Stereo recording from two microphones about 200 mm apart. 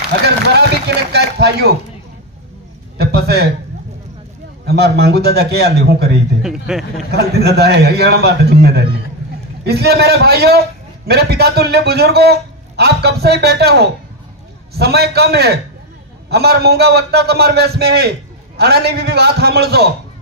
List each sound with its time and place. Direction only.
0.5 s a sound: 55° right (ahead or behind)
3.0 s a man's voice: 55° right (ahead or behind)
4.6 s a man's voice: 55° right (ahead or behind)
6.4 s speech: 5° right (ahead or behind)
7.1 s a man's voice: 55° right (ahead or behind)